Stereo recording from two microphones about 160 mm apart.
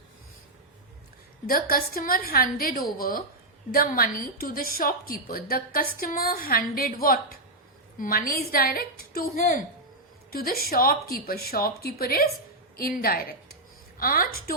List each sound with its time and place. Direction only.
1.5 s a woman's voice: 70° left (ahead or behind)